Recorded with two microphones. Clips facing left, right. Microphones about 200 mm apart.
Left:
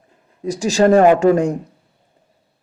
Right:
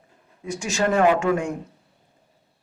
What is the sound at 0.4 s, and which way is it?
Speech, 35° left (ahead or behind).